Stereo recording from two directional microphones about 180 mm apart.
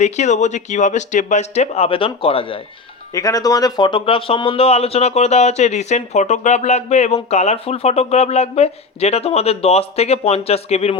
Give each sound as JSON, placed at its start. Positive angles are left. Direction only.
{"t": 0.0, "sound": "speech", "side_deg": 40}
{"t": 3.1, "sound": "speech", "side_deg": 20}